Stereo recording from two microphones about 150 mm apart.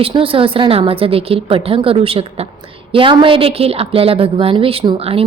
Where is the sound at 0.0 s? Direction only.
40° right (ahead or behind).